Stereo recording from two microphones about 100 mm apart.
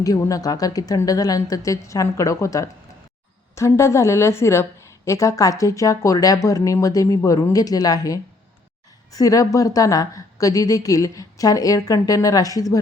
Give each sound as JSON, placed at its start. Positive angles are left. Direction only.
{"t": 0.0, "sound": "a woman's voice", "side_deg": 35}